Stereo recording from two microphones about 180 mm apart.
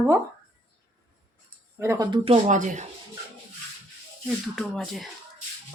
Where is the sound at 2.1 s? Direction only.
35° right (ahead or behind).